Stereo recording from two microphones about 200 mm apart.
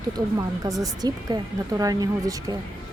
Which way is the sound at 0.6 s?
15° right (ahead or behind).